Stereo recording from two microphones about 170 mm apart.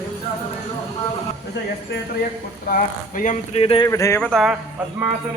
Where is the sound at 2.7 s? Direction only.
50° left (ahead or behind); by 3.9 s 35° left (ahead or behind).